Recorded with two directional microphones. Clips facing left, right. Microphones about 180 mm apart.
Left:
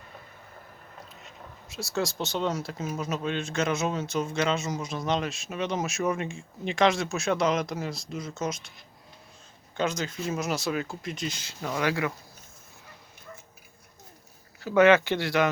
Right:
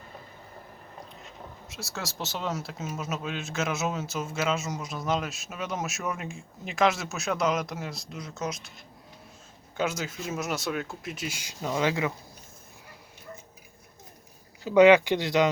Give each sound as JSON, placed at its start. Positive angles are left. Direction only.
{"t": 1.6, "sound": "speech", "side_deg": 0}
{"t": 9.7, "sound": "speech", "side_deg": -5}
{"t": 14.6, "sound": "speech", "side_deg": -15}